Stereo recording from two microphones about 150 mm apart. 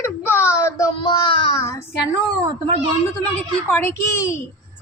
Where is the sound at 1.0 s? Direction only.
35° left (ahead or behind).